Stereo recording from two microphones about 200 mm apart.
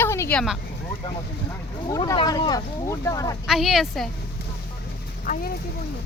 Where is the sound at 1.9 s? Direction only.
20° left (ahead or behind).